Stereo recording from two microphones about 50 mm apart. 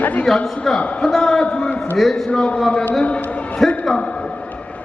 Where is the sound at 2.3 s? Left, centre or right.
Centre.